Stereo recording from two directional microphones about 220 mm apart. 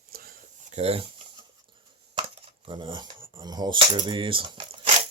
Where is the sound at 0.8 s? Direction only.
25° right (ahead or behind).